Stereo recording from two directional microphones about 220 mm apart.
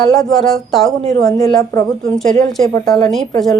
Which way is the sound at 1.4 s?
15° left (ahead or behind).